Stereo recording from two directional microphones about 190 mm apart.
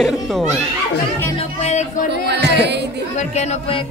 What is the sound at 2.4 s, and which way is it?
Speech, 65° right (ahead or behind).